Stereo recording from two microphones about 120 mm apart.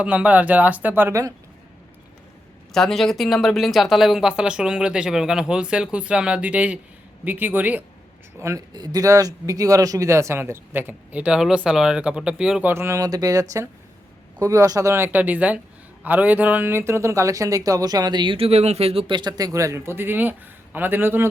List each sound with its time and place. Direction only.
0.0 s speech: 10° right (ahead or behind)
2.7 s speech: 5° left (ahead or behind); by 7.9 s 15° right (ahead or behind)
8.4 s speech: 25° right (ahead or behind); by 12.6 s 5° right (ahead or behind)
12.6 s speech: 20° right (ahead or behind)